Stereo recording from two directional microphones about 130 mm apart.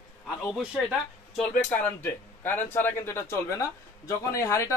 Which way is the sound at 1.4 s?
10° left (ahead or behind).